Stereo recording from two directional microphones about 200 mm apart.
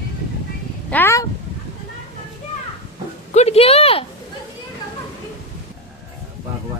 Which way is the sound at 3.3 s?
30° left (ahead or behind).